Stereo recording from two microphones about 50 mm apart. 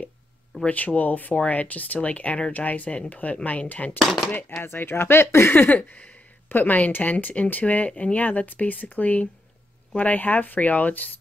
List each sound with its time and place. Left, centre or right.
0.7 s speech: left
4.6 s speech: left
5.6 s speech: left